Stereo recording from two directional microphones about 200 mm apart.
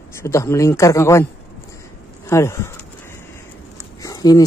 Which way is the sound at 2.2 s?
15° left (ahead or behind).